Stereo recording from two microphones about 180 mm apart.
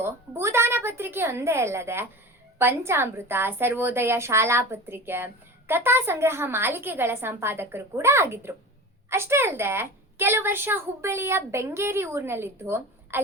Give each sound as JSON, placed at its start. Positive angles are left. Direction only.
{"t": 0.0, "sound": "a woman's voice", "side_deg": -15}